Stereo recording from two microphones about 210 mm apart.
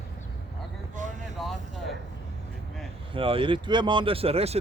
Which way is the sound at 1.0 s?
35° right (ahead or behind).